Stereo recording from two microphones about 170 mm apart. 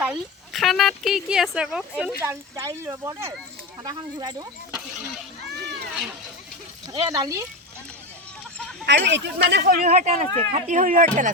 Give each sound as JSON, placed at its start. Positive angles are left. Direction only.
{"t": 0.0, "sound": "speech", "side_deg": -5}
{"t": 2.2, "sound": "speech", "side_deg": -15}
{"t": 6.8, "sound": "speech", "side_deg": -20}
{"t": 8.9, "sound": "speech", "side_deg": -90}
{"t": 9.8, "sound": "speech", "side_deg": -45}